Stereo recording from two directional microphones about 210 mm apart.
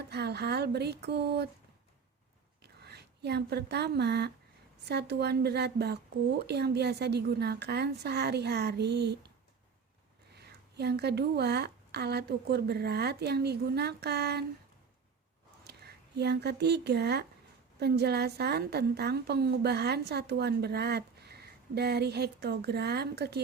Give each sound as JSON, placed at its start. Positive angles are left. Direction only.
{"t": 0.1, "sound": "speech", "side_deg": -50}
{"t": 2.6, "sound": "a woman's voice", "side_deg": -50}
{"t": 10.3, "sound": "a woman's voice", "side_deg": -50}
{"t": 15.6, "sound": "a woman's voice", "side_deg": -50}